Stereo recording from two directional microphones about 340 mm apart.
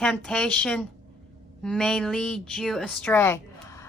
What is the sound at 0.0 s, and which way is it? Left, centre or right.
A woman's voice, centre.